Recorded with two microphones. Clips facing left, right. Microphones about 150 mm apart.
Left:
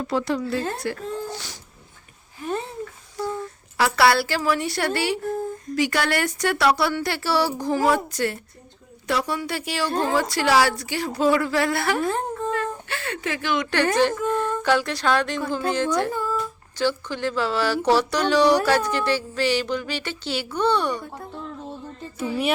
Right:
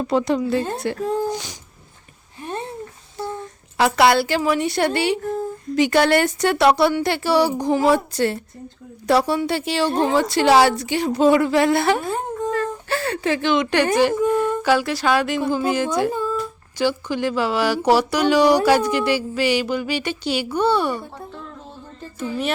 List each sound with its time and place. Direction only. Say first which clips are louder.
0.0 s a woman's voice: right 5 dB; 20° right (ahead or behind)
3.2 s a sound: left 1 dB; 25° right (ahead or behind)
3.8 s a woman's voice: right 3 dB; 20° right (ahead or behind)
12.5 s speech: right 4 dB; 35° right (ahead or behind); by 21.0 s 5° right (ahead or behind)
22.2 s music: even; 10° left (ahead or behind)